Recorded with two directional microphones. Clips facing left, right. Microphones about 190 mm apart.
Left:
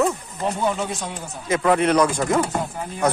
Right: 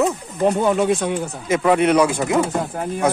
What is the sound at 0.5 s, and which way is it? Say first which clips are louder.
Speech: right 7 dB; 60° right (ahead or behind).